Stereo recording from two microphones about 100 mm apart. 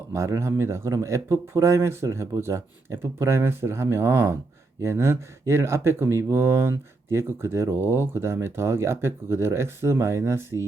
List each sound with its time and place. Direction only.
0.1 s speech: 25° right (ahead or behind)